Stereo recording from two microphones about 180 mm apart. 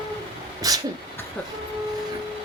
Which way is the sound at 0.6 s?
20° right (ahead or behind).